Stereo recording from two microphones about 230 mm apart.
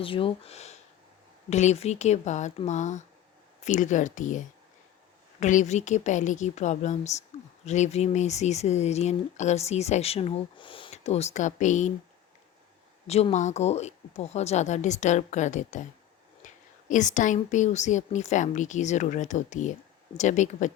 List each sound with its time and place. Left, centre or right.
0.0 s a woman's voice: left
13.1 s a woman's voice: left
16.4 s whispering: left
16.9 s speech: left